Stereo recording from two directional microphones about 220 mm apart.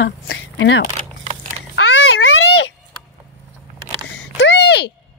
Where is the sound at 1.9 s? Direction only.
55° left (ahead or behind).